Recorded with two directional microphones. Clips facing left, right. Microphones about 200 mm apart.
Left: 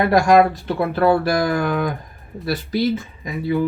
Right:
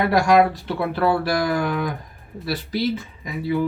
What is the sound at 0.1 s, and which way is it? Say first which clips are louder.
Speech: left 2 dB; 45° left (ahead or behind).